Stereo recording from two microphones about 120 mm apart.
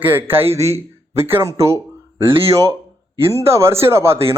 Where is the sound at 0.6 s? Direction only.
60° right (ahead or behind).